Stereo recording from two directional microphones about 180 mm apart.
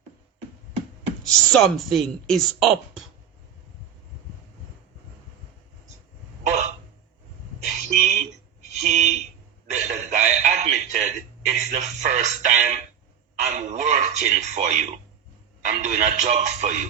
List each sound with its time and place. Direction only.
1.2 s speech: centre (ahead or behind)
6.4 s throat clearing: 40° right (ahead or behind)
7.6 s a sound: 40° right (ahead or behind)
15.6 s music: 45° right (ahead or behind)